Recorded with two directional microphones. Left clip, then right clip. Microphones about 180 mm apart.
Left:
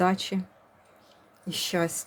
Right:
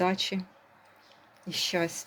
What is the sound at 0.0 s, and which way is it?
Speech, 20° left (ahead or behind).